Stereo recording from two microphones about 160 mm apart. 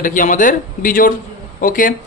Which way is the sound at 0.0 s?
55° left (ahead or behind).